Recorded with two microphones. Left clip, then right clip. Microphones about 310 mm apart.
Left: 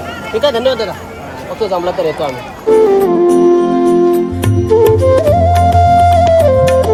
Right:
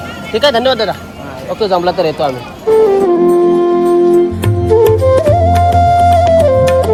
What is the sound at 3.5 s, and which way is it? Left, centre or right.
Music, centre.